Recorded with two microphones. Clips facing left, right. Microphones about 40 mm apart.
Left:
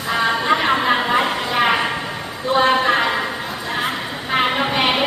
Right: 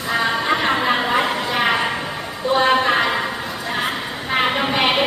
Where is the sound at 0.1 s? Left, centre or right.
Centre.